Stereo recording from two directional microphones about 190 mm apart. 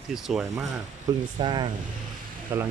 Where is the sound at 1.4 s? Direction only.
25° right (ahead or behind).